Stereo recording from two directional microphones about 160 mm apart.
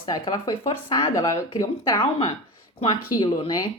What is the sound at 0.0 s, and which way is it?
Speech, 25° left (ahead or behind).